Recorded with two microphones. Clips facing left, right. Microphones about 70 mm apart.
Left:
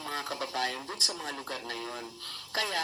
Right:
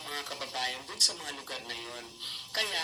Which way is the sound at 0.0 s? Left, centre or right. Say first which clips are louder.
Left 4 dB; left.